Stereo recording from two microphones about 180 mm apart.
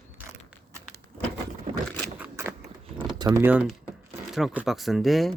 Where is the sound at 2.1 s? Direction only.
10° right (ahead or behind).